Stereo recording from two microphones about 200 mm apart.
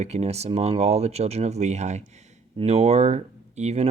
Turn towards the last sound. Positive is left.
turn(degrees=-35)  # may be behind; listen again after turning